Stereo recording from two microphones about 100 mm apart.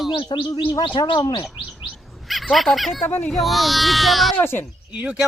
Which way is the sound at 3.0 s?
20° left (ahead or behind).